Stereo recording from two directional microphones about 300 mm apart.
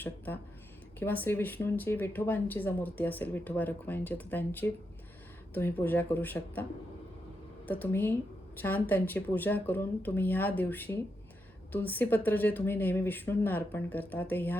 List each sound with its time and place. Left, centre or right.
0.9 s speech: centre
7.7 s speech: centre